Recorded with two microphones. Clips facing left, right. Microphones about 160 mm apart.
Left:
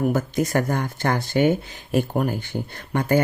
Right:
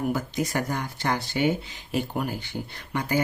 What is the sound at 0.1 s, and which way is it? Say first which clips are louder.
Speech: left 5 dB; 50° left (ahead or behind).